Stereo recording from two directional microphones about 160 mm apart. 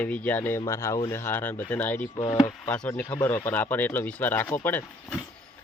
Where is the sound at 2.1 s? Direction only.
25° left (ahead or behind).